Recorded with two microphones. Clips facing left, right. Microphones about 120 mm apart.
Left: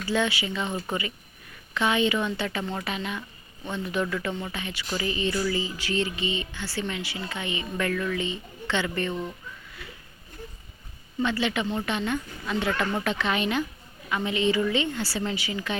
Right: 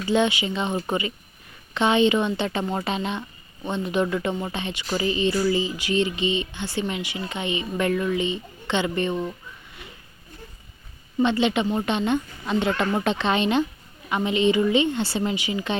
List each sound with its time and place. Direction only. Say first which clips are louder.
0.0 s speech: right 5 dB; 20° right (ahead or behind)
11.2 s speech: right 5 dB; 20° right (ahead or behind)